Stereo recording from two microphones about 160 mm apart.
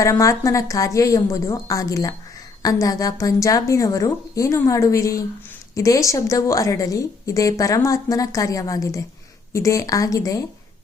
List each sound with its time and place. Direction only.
0.0 s a woman's voice: 20° left (ahead or behind)